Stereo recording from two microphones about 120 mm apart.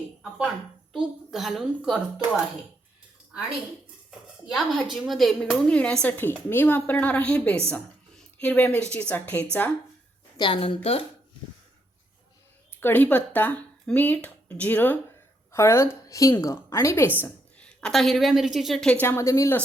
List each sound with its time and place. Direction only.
0.2 s a woman's voice: 5° right (ahead or behind)
4.5 s a woman's voice: centre (ahead or behind)
7.7 s a sound: 10° left (ahead or behind)
8.9 s a woman's voice: 10° left (ahead or behind)
10.3 s a woman's voice: 45° left (ahead or behind)
12.7 s a woman's voice: 15° left (ahead or behind)
17.2 s a woman's voice: 10° left (ahead or behind)
19.0 s a woman's voice: 25° left (ahead or behind)